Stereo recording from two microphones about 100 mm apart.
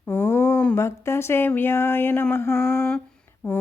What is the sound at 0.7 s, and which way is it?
Speech, 25° left (ahead or behind).